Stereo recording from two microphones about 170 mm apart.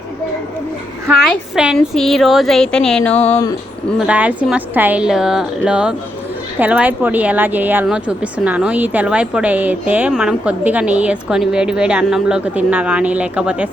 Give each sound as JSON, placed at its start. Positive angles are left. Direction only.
{"t": 1.0, "sound": "a woman's voice", "side_deg": 0}
{"t": 3.2, "sound": "speech", "side_deg": 40}
{"t": 3.9, "sound": "a woman's voice", "side_deg": -5}